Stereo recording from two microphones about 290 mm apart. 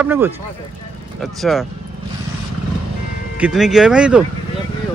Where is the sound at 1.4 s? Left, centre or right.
Centre.